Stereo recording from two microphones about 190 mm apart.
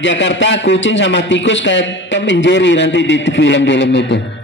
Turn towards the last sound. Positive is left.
turn(degrees=70)  # may be behind; listen again after turning